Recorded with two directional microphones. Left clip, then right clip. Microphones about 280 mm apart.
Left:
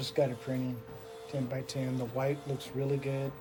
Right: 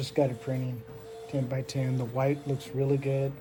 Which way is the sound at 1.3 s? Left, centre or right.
Right.